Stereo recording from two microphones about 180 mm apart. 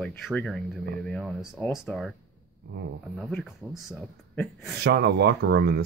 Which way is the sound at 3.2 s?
Centre (ahead or behind).